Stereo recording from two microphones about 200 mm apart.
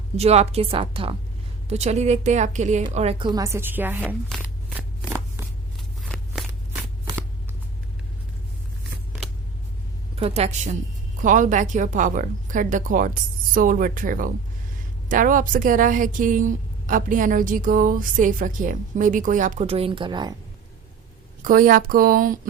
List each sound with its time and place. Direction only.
0.2 s a woman's voice: 30° right (ahead or behind); by 4.1 s 10° right (ahead or behind)
10.2 s a woman's voice: 30° right (ahead or behind)
21.4 s speech: 45° right (ahead or behind)